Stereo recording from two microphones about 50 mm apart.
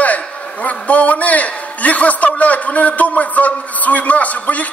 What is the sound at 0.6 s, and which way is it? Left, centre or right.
A man's voice, left.